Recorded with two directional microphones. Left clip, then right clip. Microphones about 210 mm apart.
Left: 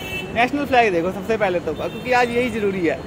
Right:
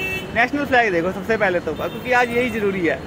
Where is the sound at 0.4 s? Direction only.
Centre (ahead or behind).